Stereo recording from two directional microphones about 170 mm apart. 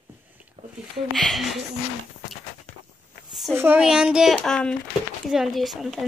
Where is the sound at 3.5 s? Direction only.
10° right (ahead or behind).